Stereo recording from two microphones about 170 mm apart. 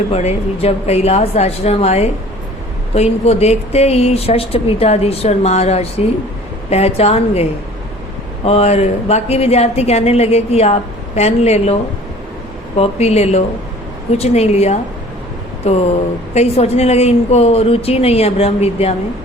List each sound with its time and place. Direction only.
0.1 s a woman's voice: 40° left (ahead or behind)
8.4 s a woman's voice: 35° left (ahead or behind)